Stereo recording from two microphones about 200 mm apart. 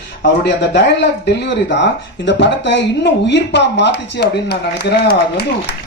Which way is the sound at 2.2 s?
60° left (ahead or behind).